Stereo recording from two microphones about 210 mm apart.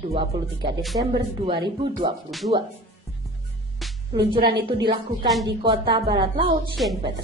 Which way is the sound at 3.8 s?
Centre (ahead or behind).